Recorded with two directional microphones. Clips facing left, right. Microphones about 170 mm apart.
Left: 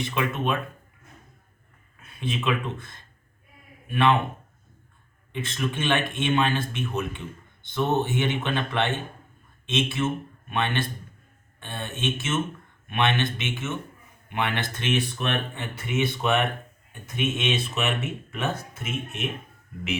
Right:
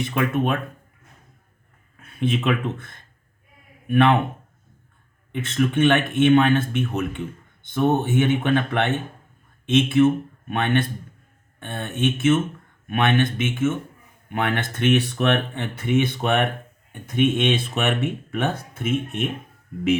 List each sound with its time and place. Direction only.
0.0 s speech: 55° right (ahead or behind)
2.0 s speech: 60° right (ahead or behind)
5.3 s speech: 60° right (ahead or behind)